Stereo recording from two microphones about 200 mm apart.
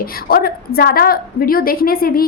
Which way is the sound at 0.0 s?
50° left (ahead or behind).